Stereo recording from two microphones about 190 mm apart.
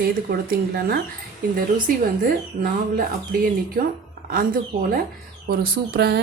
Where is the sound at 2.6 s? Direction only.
50° right (ahead or behind).